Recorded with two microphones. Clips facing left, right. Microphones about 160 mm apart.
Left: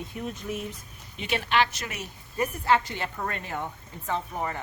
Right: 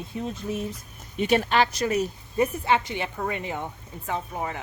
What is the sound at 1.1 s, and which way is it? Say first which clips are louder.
Speech: right 5 dB; 40° right (ahead or behind).